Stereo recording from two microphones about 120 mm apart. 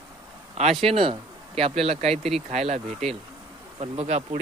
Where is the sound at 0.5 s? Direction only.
60° right (ahead or behind).